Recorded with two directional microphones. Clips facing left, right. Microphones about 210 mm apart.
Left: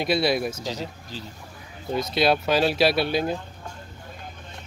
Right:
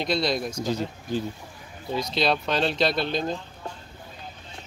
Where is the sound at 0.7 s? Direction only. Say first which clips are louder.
Right 5 dB; 55° right (ahead or behind).